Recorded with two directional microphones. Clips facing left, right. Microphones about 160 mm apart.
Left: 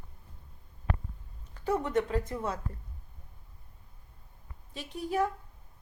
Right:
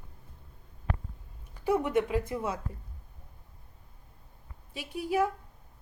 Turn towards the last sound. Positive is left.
turn(degrees=-10)  # may be behind; listen again after turning